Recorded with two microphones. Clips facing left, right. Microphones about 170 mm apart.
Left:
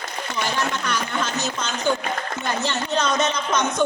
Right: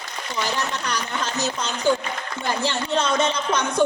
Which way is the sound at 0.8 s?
35° right (ahead or behind).